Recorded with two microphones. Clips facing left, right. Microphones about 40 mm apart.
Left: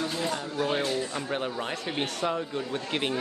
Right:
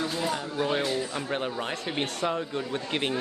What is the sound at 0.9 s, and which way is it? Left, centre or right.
Speech, centre.